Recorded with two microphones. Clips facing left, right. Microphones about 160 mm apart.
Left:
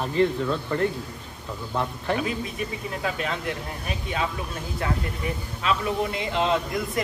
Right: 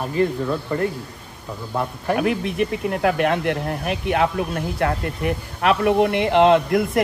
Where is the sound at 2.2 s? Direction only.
65° right (ahead or behind).